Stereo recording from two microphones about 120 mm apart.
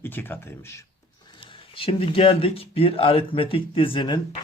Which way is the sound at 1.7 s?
50° left (ahead or behind).